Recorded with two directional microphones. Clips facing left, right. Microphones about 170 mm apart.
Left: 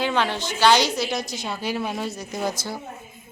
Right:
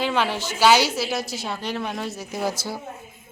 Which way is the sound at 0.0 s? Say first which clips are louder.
Even; 5° right (ahead or behind).